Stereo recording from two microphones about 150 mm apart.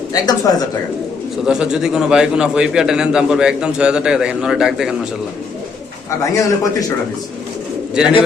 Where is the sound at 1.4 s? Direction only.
5° right (ahead or behind).